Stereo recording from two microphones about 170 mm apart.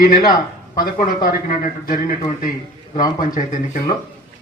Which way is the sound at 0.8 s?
55° left (ahead or behind).